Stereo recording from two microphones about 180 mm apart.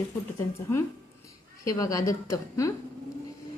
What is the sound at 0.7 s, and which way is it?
A woman's voice, 15° left (ahead or behind).